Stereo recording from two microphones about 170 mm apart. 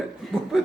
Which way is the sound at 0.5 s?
5° right (ahead or behind).